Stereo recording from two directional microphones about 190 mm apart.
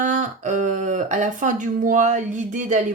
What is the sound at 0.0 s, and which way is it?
Speech, 40° right (ahead or behind).